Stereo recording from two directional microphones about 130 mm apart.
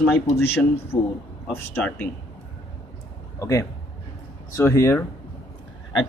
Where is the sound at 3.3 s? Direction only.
25° left (ahead or behind).